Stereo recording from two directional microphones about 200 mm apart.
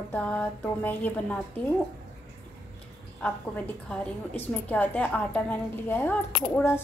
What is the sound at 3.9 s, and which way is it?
A woman's voice, 10° left (ahead or behind).